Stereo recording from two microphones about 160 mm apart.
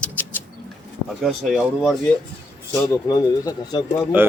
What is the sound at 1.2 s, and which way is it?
Speech, centre (ahead or behind).